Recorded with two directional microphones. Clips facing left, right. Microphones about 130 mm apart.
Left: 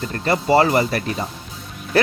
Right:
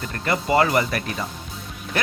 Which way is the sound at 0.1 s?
35° left (ahead or behind).